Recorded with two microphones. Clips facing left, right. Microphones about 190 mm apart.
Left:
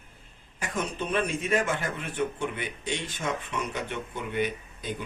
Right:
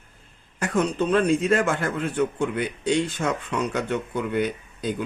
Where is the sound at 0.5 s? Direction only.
75° right (ahead or behind).